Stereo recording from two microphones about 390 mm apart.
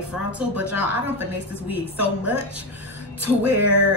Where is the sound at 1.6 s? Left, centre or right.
Right.